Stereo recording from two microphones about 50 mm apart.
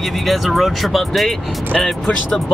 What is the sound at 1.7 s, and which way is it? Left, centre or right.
Speech, centre.